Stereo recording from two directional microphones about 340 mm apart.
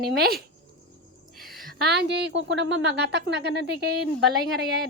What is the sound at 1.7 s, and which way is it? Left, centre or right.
A woman's voice, right.